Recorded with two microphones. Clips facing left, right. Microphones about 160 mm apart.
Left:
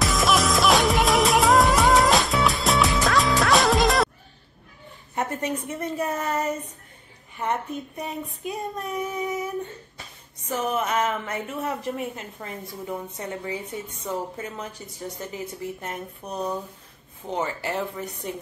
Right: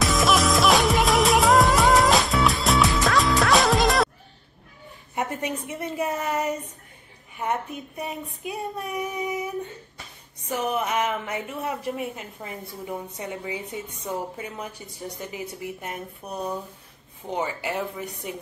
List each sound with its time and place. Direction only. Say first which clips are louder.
0.0 s music: right 1 dB; centre (ahead or behind)
5.1 s a woman's voice: left 1 dB; 15° right (ahead or behind)
10.5 s a woman's voice: even; 15° right (ahead or behind)